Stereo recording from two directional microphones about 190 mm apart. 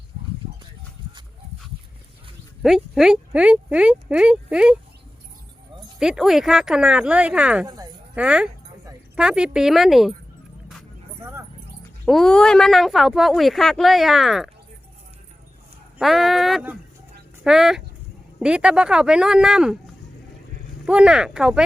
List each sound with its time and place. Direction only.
1.0 s livestock: 25° right (ahead or behind)
2.6 s speech: centre (ahead or behind)
6.0 s speech: centre (ahead or behind)
7.7 s speech: 20° right (ahead or behind)
8.1 s speech: 5° right (ahead or behind)
11.2 s dog: 15° right (ahead or behind)
12.0 s speech: centre (ahead or behind)
16.0 s speech: centre (ahead or behind)
20.8 s speech: 5° right (ahead or behind)